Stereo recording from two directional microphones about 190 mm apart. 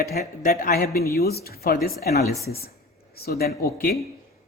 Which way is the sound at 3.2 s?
55° left (ahead or behind).